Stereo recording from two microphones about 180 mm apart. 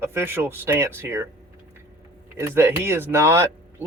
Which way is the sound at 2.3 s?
10° right (ahead or behind).